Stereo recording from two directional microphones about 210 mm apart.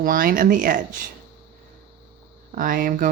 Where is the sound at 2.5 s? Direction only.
40° right (ahead or behind).